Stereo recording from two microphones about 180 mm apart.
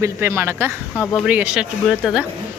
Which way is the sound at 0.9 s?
5° left (ahead or behind).